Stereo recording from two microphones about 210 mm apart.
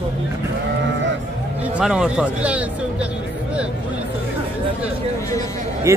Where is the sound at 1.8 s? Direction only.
5° right (ahead or behind).